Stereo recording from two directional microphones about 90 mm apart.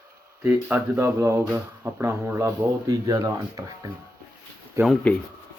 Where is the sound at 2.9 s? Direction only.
40° right (ahead or behind).